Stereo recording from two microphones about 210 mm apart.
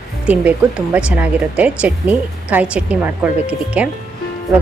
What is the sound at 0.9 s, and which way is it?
A woman's voice, 5° right (ahead or behind).